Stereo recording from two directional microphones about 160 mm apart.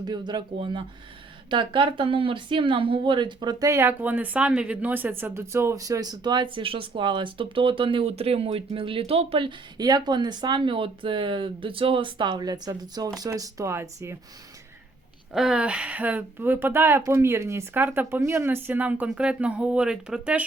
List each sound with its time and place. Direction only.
0.0 s speech: 25° right (ahead or behind)
15.3 s speech: 5° right (ahead or behind)